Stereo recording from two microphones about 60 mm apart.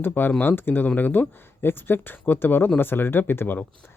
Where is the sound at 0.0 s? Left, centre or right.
Left.